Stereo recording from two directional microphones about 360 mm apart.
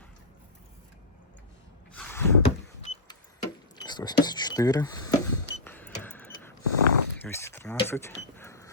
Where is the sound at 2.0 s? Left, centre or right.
Centre.